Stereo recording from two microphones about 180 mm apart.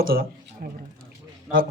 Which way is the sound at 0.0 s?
55° right (ahead or behind).